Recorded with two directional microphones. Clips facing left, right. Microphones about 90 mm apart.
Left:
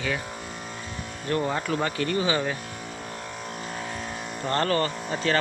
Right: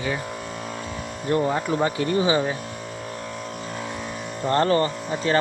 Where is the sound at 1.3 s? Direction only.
20° right (ahead or behind).